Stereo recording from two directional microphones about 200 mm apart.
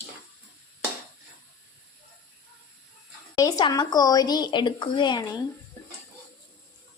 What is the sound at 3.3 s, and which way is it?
Speech, 20° left (ahead or behind).